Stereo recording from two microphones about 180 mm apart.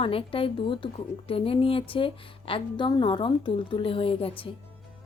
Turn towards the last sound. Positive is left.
turn(degrees=30)  # may be behind; listen again after turning